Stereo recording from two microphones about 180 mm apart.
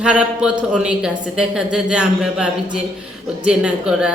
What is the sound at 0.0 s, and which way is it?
Speech, 5° right (ahead or behind).